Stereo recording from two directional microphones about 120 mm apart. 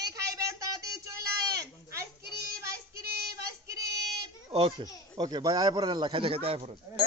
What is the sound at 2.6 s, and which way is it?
Child singing, 25° right (ahead or behind).